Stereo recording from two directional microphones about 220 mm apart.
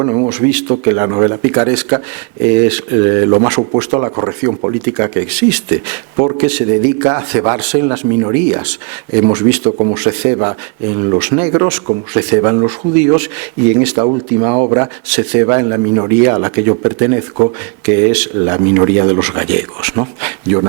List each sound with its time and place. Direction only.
0.0 s speech: 20° right (ahead or behind)
9.6 s speech: 30° right (ahead or behind)
9.9 s speech: 10° right (ahead or behind)
13.9 s speech: 30° right (ahead or behind)
14.7 s speech: 10° right (ahead or behind)